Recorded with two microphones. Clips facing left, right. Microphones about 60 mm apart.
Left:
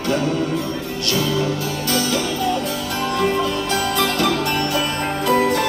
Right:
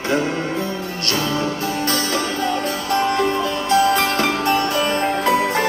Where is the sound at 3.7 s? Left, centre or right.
Right.